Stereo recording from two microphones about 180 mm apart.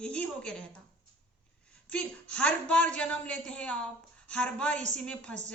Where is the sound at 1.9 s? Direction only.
5° left (ahead or behind).